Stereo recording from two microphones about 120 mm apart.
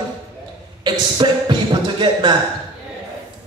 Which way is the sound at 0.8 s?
35° right (ahead or behind).